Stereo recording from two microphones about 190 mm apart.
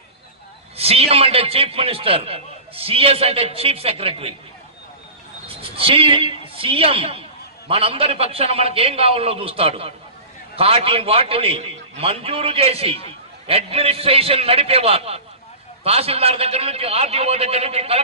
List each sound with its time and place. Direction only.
0.7 s a man's voice: 30° right (ahead or behind)
5.5 s a man's voice: 30° right (ahead or behind)